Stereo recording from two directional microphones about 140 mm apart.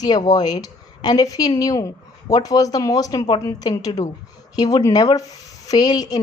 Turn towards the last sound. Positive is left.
turn(degrees=30)  # may be behind; listen again after turning